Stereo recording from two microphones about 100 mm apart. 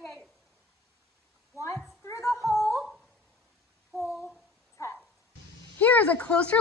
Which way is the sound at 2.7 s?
5° right (ahead or behind).